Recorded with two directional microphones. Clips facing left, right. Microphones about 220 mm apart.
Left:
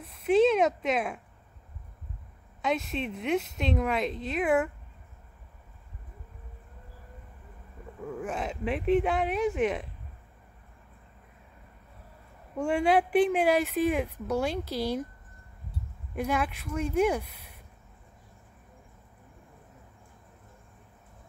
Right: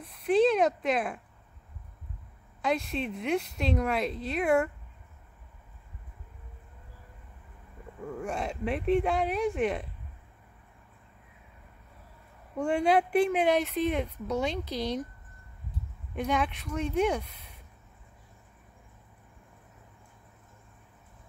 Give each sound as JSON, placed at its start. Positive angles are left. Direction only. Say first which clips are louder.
{"t": 0.0, "sound": "speech", "louder": "left 1 dB", "side_deg": 0}
{"t": 2.6, "sound": "speech", "louder": "even", "side_deg": 0}
{"t": 8.0, "sound": "speech", "louder": "even", "side_deg": 5}
{"t": 12.5, "sound": "speech", "louder": "even", "side_deg": 5}
{"t": 16.2, "sound": "speech", "louder": "even", "side_deg": 5}